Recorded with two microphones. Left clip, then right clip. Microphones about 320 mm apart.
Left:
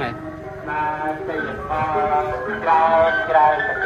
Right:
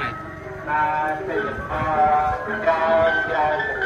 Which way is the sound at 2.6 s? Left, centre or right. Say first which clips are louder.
Left 3 dB; centre.